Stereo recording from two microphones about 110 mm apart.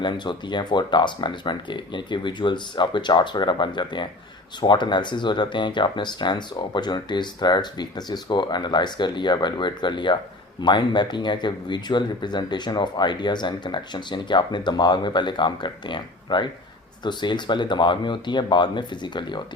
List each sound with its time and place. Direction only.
0.0 s speech: 45° left (ahead or behind)